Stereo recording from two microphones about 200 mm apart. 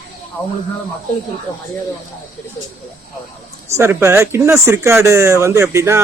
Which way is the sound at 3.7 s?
10° right (ahead or behind).